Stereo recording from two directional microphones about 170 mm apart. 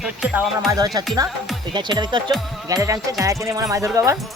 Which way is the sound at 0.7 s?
20° right (ahead or behind).